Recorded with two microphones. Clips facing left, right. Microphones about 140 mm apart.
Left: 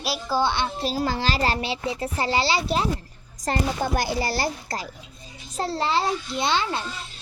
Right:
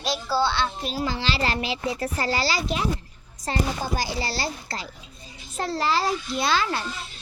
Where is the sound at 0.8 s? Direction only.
40° left (ahead or behind).